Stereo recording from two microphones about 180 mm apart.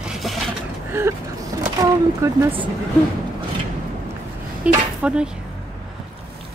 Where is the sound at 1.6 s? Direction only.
20° right (ahead or behind).